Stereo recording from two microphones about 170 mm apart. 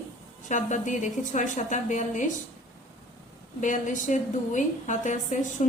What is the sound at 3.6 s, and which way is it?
A woman's voice, 45° left (ahead or behind).